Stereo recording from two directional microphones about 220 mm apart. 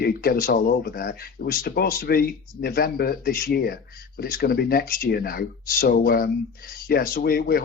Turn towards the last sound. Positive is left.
turn(degrees=45)  # may be behind; listen again after turning